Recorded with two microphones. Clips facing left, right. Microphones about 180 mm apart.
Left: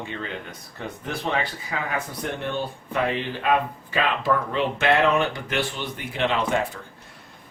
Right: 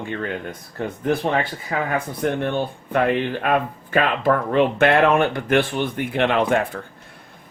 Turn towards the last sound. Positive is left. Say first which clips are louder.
# right 4 dB
turn(degrees=-55)  # may be behind; listen again after turning